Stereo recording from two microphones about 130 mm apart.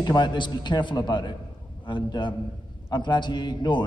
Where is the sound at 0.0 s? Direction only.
35° left (ahead or behind).